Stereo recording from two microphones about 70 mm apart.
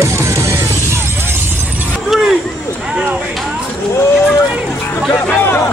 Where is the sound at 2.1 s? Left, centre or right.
Centre.